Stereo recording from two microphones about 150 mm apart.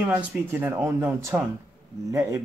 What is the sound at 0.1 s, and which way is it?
Speech, 10° right (ahead or behind).